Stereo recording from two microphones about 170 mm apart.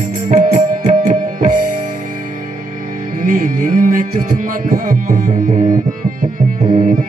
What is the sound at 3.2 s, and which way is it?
Music, 55° right (ahead or behind).